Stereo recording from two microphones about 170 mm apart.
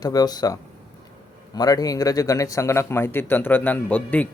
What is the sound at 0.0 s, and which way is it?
Speech, 20° left (ahead or behind).